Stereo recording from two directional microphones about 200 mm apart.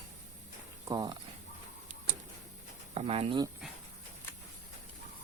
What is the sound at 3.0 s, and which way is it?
Speech, 30° right (ahead or behind).